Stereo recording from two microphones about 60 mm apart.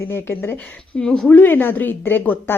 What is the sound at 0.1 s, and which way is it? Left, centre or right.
Speech, left.